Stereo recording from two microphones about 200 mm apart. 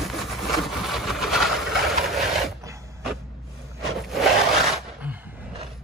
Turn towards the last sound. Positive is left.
turn(degrees=-5)  # may be behind; listen again after turning